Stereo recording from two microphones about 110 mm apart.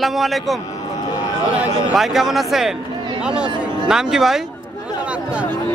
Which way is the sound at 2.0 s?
Centre (ahead or behind).